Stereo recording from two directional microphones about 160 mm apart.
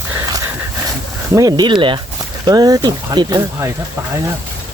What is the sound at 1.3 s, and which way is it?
Speech, 25° right (ahead or behind).